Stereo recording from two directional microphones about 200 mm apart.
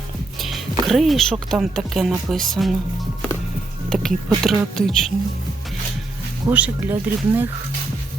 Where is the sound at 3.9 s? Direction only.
Centre (ahead or behind).